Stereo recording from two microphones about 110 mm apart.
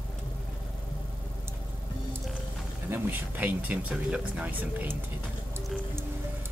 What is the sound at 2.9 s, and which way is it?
Speech, 20° right (ahead or behind).